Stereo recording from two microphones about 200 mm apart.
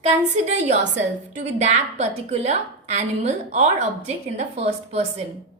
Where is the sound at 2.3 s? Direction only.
35° right (ahead or behind).